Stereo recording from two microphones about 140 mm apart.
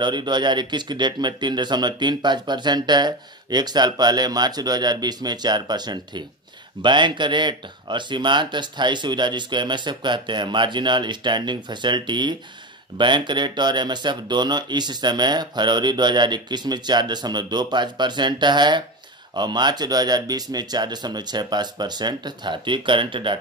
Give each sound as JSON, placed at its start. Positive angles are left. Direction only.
{"t": 0.0, "sound": "speech", "side_deg": -35}